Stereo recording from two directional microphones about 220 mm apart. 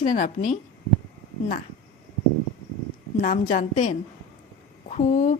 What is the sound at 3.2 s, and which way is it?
A woman's voice, 35° left (ahead or behind).